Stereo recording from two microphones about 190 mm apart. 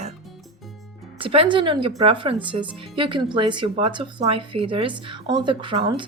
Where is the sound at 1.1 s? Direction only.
30° right (ahead or behind).